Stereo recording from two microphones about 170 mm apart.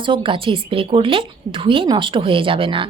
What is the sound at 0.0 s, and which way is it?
A woman's voice, 30° right (ahead or behind).